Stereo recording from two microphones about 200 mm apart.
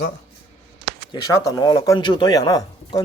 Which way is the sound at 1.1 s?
20° left (ahead or behind).